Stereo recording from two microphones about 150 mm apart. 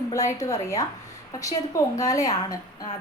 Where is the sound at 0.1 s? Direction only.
20° left (ahead or behind).